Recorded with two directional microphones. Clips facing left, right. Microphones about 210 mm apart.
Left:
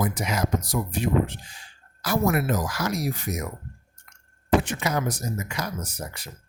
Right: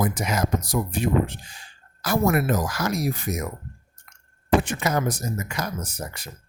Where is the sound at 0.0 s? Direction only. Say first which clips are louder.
Right 2 dB; 45° right (ahead or behind).